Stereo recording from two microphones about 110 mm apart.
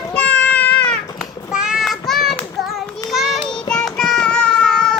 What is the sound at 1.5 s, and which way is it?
Child singing, 5° right (ahead or behind).